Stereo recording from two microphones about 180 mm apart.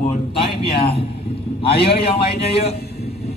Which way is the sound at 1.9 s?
35° left (ahead or behind).